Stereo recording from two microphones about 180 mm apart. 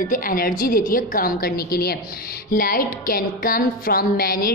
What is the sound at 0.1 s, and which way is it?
A woman's voice, 50° left (ahead or behind).